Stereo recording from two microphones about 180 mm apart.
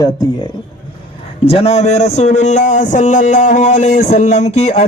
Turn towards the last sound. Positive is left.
turn(degrees=40)  # may be behind; listen again after turning